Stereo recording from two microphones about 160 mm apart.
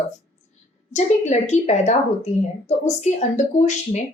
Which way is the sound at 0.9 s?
45° left (ahead or behind).